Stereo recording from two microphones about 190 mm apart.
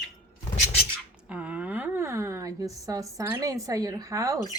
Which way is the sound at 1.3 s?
5° right (ahead or behind).